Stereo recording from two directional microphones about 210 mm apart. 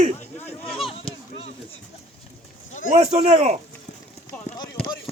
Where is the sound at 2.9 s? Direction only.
35° right (ahead or behind).